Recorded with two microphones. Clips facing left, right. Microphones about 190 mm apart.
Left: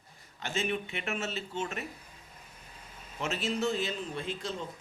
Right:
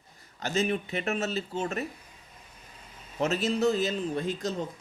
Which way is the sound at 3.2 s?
40° right (ahead or behind).